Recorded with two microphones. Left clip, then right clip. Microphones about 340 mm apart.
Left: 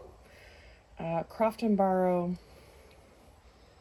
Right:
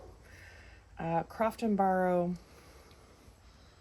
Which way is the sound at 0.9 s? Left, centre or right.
Right.